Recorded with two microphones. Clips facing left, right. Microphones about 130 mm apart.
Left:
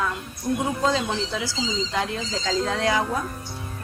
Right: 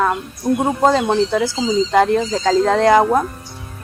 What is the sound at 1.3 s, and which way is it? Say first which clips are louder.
Speech: right 10 dB; 55° right (ahead or behind).